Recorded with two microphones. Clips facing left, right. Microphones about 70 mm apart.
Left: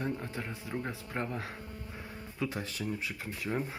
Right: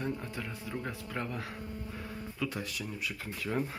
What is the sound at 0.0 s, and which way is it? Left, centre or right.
Speech, left.